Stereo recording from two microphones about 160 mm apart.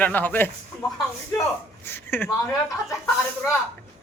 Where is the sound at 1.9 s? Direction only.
15° left (ahead or behind).